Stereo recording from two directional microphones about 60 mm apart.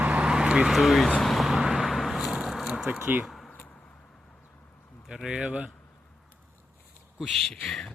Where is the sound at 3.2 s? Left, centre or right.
Centre.